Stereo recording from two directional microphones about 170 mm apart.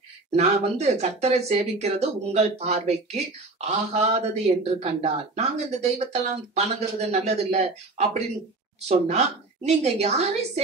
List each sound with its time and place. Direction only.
0.3 s speech: 40° right (ahead or behind)